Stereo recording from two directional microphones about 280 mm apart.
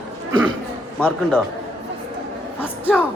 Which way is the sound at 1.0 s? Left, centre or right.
Centre.